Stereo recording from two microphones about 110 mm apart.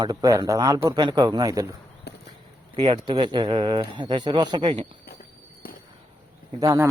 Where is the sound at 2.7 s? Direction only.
45° right (ahead or behind).